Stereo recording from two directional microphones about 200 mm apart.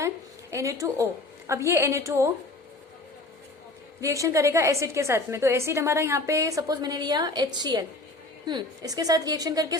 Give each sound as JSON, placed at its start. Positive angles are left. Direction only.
{"t": 0.5, "sound": "a woman's voice", "side_deg": -15}
{"t": 4.0, "sound": "a woman's voice", "side_deg": -15}